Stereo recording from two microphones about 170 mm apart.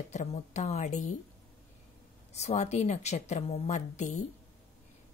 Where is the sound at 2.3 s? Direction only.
40° left (ahead or behind).